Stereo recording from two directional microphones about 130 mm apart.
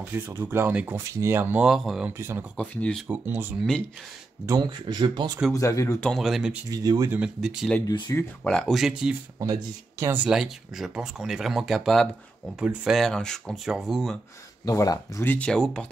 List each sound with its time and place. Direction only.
0.4 s speech: 15° right (ahead or behind)
2.1 s speech: 20° right (ahead or behind)
2.5 s speech: 10° left (ahead or behind)
3.1 s speech: 15° right (ahead or behind)
4.5 s speech: 35° right (ahead or behind)
5.5 s speech: 25° left (ahead or behind)
5.9 s speech: 5° left (ahead or behind)
6.7 s speech: 30° right (ahead or behind)
7.1 s speech: 5° right (ahead or behind)
7.8 s speech: 30° left (ahead or behind)
8.2 s speech: 5° left (ahead or behind)
9.4 s speech: 25° right (ahead or behind); by 14.1 s 5° right (ahead or behind)
14.6 s speech: 25° left (ahead or behind)
15.3 s speech: 5° left (ahead or behind)